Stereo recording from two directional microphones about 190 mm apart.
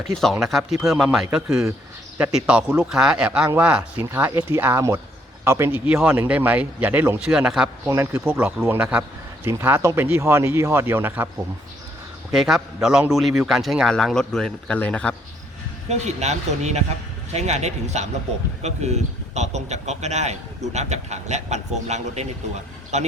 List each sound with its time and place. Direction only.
0.2 s a man's voice: centre (ahead or behind)
7.9 s speech: 15° right (ahead or behind)
12.3 s a man's voice: centre (ahead or behind)
15.9 s a man's voice: 35° right (ahead or behind)